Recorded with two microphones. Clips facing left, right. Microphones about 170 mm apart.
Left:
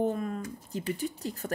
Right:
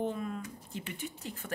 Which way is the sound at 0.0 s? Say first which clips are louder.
Left 5 dB; 45° left (ahead or behind).